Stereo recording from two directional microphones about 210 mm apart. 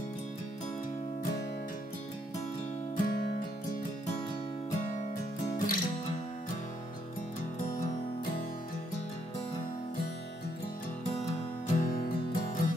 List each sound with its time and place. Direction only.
3.0 s music: 50° left (ahead or behind)
4.6 s music: 40° left (ahead or behind)
7.6 s music: 40° left (ahead or behind)
11.7 s music: 40° left (ahead or behind)